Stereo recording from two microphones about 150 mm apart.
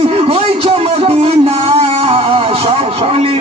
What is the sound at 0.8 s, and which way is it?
Music, 45° right (ahead or behind).